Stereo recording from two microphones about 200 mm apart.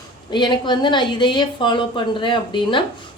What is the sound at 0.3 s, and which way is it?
A woman's voice, 25° left (ahead or behind).